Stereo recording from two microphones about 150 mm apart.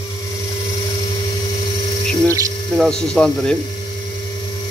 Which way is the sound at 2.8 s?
5° left (ahead or behind).